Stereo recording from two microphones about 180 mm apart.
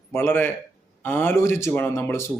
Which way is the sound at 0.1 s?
10° left (ahead or behind).